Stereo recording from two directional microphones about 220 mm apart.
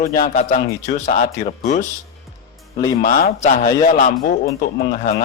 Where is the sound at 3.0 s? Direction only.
40° left (ahead or behind).